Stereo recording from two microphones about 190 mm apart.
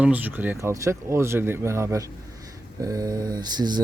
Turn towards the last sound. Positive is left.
turn(degrees=-20)  # may be behind; listen again after turning